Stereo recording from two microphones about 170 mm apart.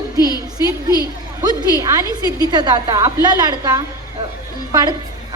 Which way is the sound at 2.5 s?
25° right (ahead or behind).